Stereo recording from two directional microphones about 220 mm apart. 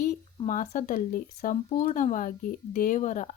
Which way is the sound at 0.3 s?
35° left (ahead or behind).